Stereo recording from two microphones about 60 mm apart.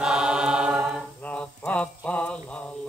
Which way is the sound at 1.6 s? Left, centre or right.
Left.